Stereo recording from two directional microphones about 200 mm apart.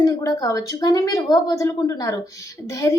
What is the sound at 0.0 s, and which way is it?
A woman's voice, 20° left (ahead or behind).